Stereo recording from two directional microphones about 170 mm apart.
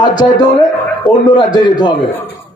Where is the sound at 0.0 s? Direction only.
25° left (ahead or behind).